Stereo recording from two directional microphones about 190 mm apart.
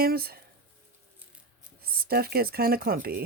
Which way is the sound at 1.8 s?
55° right (ahead or behind).